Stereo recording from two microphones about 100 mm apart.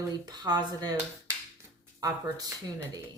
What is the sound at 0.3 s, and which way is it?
Speech, 40° right (ahead or behind).